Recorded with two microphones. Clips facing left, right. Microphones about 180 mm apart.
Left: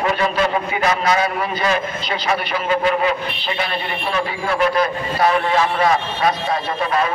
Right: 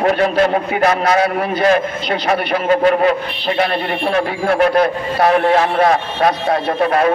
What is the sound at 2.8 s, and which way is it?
A man's voice, 45° right (ahead or behind).